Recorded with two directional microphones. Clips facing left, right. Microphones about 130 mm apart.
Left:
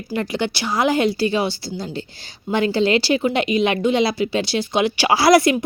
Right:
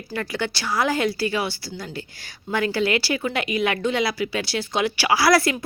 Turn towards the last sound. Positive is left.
turn(degrees=20)  # may be behind; listen again after turning